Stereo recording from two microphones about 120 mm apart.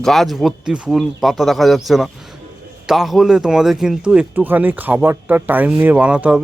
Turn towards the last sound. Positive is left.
turn(degrees=-10)  # may be behind; listen again after turning